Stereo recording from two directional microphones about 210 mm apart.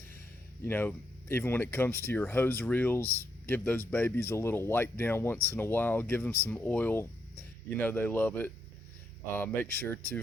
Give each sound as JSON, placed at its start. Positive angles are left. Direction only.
{"t": 0.6, "sound": "speech", "side_deg": 10}